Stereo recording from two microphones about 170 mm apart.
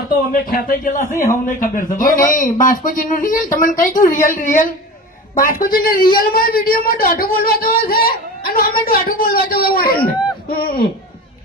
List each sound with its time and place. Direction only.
0.1 s a man's voice: 55° left (ahead or behind)